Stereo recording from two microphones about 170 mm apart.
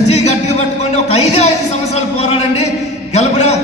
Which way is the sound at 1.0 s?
40° left (ahead or behind).